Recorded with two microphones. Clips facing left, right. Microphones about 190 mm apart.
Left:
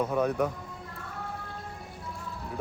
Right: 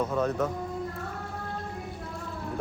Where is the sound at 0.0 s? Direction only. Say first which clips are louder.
Even; 10° left (ahead or behind).